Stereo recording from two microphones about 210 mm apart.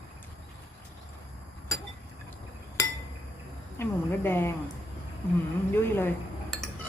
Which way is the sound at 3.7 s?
10° left (ahead or behind).